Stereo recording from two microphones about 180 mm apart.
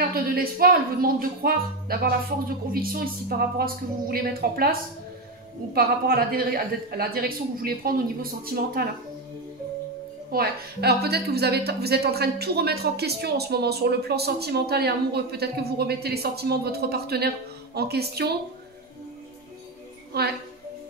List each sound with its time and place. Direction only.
0.1 s a woman's voice: 55° right (ahead or behind)
5.8 s a woman's voice: 55° right (ahead or behind)
10.3 s a woman's voice: 60° right (ahead or behind)
20.1 s a woman's voice: 65° right (ahead or behind)